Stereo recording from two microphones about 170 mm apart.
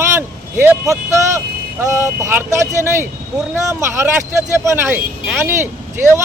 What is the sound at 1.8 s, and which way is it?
Speech, 15° right (ahead or behind).